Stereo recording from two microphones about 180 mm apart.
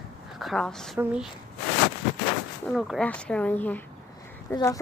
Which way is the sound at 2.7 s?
Centre (ahead or behind).